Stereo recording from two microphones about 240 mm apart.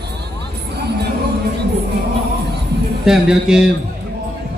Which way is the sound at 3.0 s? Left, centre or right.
Centre.